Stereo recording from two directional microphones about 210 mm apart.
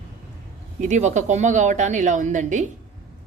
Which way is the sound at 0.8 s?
35° right (ahead or behind).